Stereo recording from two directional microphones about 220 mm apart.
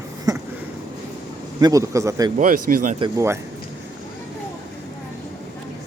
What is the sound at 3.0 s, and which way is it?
Speech, 15° right (ahead or behind).